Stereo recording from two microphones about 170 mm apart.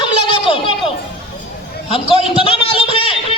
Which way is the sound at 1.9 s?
35° left (ahead or behind).